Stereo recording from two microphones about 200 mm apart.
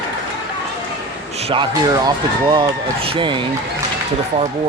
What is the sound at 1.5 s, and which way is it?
Speech, 20° right (ahead or behind).